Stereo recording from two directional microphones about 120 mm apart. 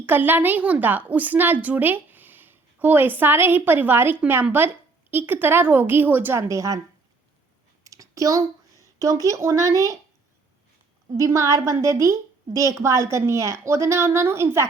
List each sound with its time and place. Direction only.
0.0 s a woman's voice: 15° right (ahead or behind)
7.9 s a sound: 30° right (ahead or behind)
9.2 s a woman's voice: 25° right (ahead or behind)
11.2 s a woman's voice: 25° right (ahead or behind)